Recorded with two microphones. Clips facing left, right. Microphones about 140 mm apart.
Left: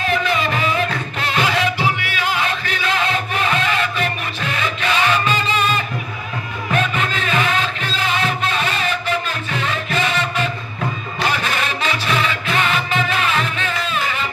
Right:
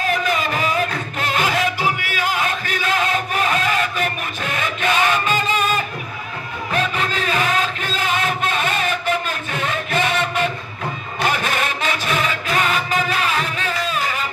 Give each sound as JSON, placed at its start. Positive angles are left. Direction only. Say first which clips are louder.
{"t": 0.0, "sound": "music", "louder": "left 1 dB", "side_deg": -45}